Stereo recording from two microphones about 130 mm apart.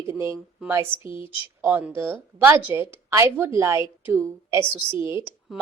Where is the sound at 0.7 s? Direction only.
20° right (ahead or behind).